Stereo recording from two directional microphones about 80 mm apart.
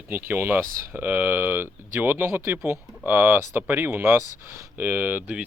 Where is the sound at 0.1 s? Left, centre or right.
Right.